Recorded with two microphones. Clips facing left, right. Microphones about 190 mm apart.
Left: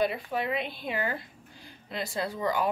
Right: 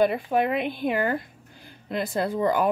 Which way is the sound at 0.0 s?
50° right (ahead or behind).